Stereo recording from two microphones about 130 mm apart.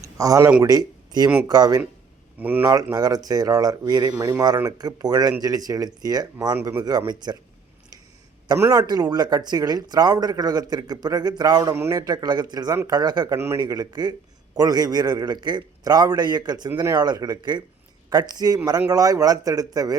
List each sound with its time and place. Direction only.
0.0 s speech: 25° right (ahead or behind)
2.4 s speech: 15° right (ahead or behind)
2.9 s speech: 30° right (ahead or behind)
8.7 s speech: 30° right (ahead or behind)
11.7 s speech: 20° right (ahead or behind)